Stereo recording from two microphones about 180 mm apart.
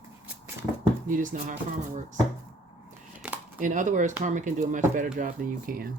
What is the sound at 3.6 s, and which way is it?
Speech, 45° right (ahead or behind).